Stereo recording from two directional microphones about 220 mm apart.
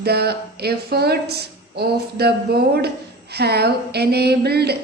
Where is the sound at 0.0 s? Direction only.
45° right (ahead or behind).